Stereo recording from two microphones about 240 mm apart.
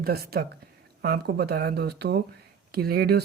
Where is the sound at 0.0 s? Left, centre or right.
Right.